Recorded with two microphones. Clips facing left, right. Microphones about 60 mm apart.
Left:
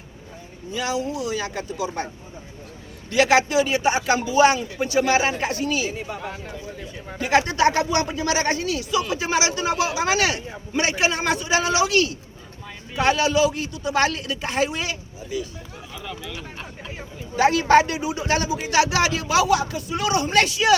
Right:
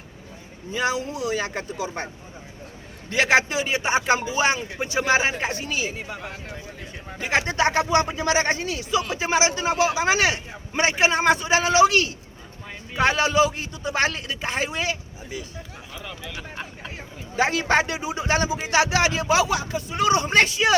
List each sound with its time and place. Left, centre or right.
0.7 s a man's voice: right
3.1 s a man's voice: right
6.0 s speech: centre
7.2 s a man's voice: right
16.0 s speech: centre
17.3 s a man's voice: centre